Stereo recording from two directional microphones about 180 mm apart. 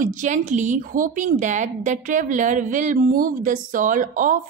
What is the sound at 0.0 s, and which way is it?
A woman's voice, 45° right (ahead or behind).